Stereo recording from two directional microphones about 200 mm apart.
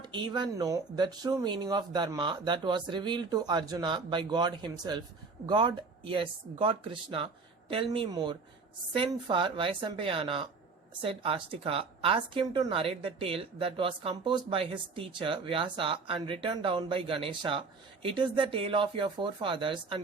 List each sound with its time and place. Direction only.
0.0 s a woman's voice: 20° right (ahead or behind)